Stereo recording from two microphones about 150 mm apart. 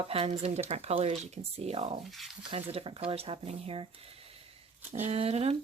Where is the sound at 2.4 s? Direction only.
40° right (ahead or behind).